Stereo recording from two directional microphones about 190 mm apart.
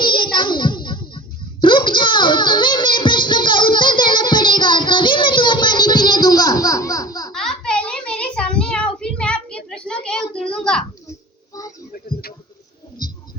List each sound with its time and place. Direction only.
0.0 s music: 25° left (ahead or behind)
1.6 s child singing: 25° left (ahead or behind)
7.3 s a sound: 5° left (ahead or behind)